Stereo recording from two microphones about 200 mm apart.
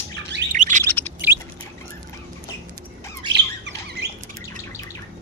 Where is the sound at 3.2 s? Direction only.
60° right (ahead or behind).